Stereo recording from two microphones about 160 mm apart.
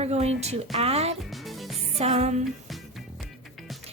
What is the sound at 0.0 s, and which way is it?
A woman's voice, 40° right (ahead or behind).